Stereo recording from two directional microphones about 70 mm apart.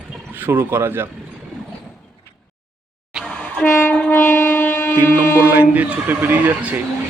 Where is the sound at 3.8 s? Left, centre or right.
Centre.